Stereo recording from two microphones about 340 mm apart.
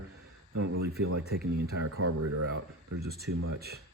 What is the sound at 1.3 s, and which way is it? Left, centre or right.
Speech, right.